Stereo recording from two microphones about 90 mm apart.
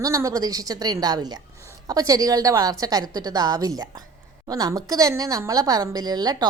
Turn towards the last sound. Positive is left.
turn(degrees=-50)  # may be behind; listen again after turning